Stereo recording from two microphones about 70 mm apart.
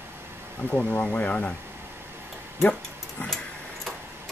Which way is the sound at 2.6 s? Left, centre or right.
Centre.